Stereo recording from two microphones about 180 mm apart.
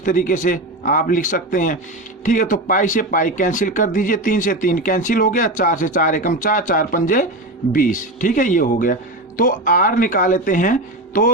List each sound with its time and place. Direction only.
0.0 s speech: 50° left (ahead or behind)